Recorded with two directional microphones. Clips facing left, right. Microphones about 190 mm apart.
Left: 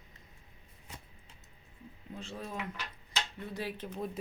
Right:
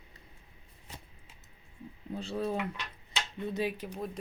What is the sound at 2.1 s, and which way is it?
Speech, 35° right (ahead or behind).